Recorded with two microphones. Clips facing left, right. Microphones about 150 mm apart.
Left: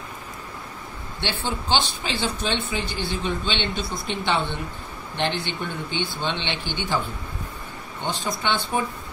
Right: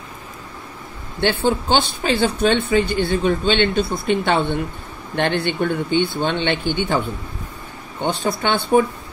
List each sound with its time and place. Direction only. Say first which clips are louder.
1.2 s speech: right 10 dB; 55° right (ahead or behind)
8.0 s speech: right 7 dB; 60° right (ahead or behind)